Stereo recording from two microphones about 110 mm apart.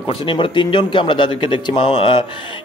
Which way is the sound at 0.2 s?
50° left (ahead or behind).